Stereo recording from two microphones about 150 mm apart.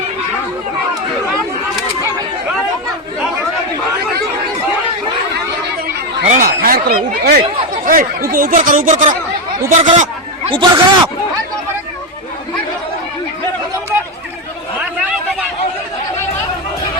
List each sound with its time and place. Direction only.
6.2 s a sound: 55° right (ahead or behind)
6.6 s speech: 80° right
7.9 s speech: 70° right (ahead or behind); by 9.1 s 55° right (ahead or behind)
9.8 s chatter: 55° right (ahead or behind)
10.5 s speech: 35° right (ahead or behind)